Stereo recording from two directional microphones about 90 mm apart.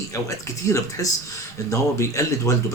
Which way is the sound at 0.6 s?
35° left (ahead or behind).